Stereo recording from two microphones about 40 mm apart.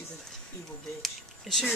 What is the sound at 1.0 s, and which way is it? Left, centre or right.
Speech, centre.